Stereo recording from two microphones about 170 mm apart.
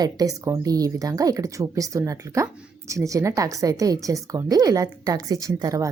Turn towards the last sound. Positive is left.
turn(degrees=-20)  # may be behind; listen again after turning